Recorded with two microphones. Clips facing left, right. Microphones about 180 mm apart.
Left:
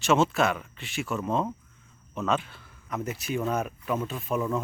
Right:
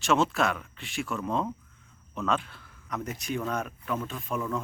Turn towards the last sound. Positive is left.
turn(degrees=10)  # may be behind; listen again after turning